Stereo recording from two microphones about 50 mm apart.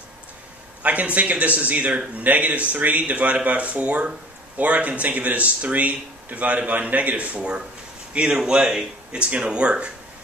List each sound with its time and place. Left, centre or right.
0.8 s a man's voice: right